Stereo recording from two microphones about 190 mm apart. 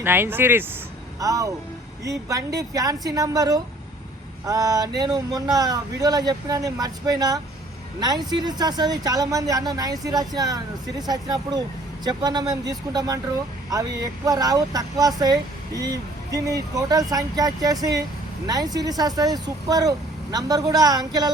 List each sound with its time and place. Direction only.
0.0 s speech: 10° right (ahead or behind)
2.6 s speech: 20° right (ahead or behind)